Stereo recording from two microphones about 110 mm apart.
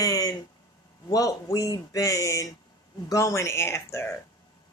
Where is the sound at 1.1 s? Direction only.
30° left (ahead or behind).